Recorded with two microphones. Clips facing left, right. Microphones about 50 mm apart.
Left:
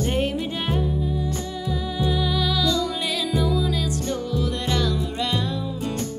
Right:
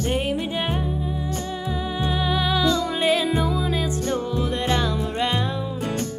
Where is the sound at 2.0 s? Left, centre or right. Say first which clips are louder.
Right 1 dB; right.